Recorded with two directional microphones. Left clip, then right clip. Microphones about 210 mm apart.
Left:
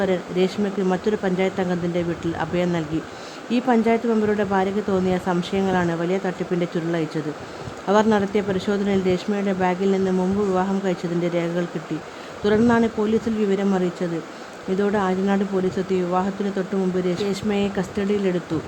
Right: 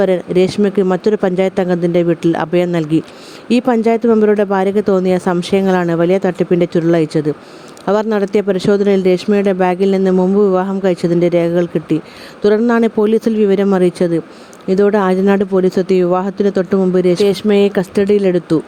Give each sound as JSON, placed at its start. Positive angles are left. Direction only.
{"t": 0.0, "sound": "speech", "side_deg": -30}